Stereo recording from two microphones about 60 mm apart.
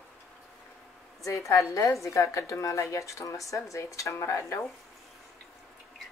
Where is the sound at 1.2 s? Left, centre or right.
Left.